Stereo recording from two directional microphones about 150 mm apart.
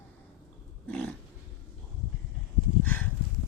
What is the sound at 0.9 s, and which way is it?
Dog, 5° left (ahead or behind).